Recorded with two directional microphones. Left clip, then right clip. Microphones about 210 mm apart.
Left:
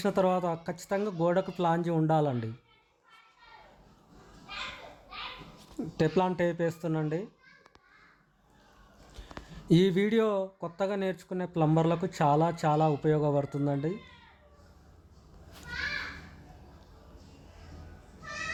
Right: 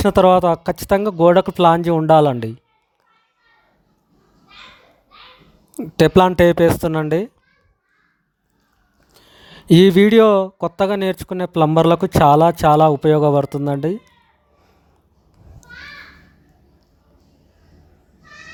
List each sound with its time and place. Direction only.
0.0 s speech: 40° right (ahead or behind)
5.7 s speech: 45° right (ahead or behind)
9.5 s speech: 40° right (ahead or behind)